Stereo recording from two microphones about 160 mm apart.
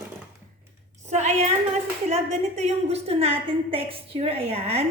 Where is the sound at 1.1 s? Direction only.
45° right (ahead or behind).